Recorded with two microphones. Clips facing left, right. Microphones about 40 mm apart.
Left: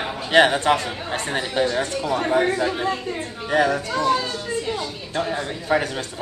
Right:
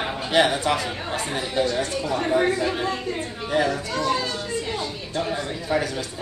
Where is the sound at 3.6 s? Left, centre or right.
Left.